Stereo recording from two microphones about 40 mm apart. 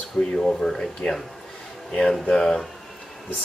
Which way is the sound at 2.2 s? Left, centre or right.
Left.